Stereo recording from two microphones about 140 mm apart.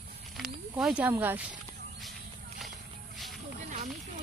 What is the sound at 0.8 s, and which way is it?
Speech, 10° right (ahead or behind).